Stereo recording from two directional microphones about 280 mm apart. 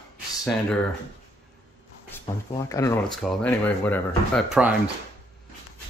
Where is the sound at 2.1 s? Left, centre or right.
Centre.